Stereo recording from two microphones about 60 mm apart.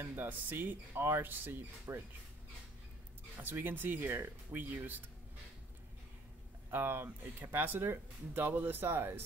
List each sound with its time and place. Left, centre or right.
0.0 s speech: right
3.3 s speech: right
6.7 s speech: right